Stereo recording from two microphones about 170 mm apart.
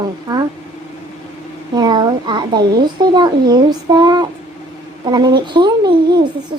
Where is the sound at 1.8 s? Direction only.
25° right (ahead or behind).